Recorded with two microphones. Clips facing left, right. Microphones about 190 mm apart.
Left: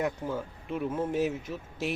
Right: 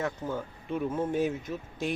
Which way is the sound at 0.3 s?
5° left (ahead or behind).